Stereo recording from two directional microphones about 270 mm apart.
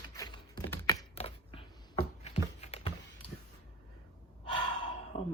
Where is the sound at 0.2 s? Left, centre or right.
Centre.